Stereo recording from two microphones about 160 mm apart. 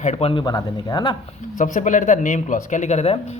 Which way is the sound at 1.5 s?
55° left (ahead or behind).